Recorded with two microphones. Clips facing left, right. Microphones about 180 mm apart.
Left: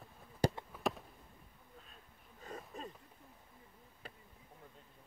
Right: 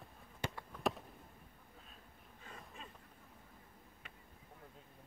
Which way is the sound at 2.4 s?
40° left (ahead or behind).